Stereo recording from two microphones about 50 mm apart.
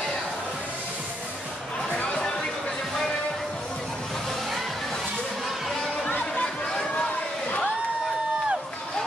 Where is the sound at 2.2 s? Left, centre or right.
Centre.